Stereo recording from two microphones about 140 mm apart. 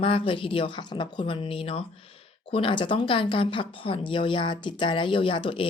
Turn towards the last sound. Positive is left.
turn(degrees=40)  # may be behind; listen again after turning